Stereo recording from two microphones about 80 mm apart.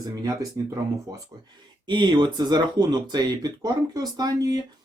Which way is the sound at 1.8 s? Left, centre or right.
Right.